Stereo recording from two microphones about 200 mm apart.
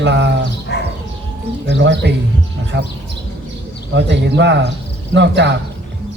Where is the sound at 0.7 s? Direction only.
55° left (ahead or behind).